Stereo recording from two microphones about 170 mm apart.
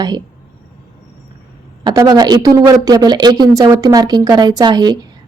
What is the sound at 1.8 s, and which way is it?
A woman's voice, 25° right (ahead or behind).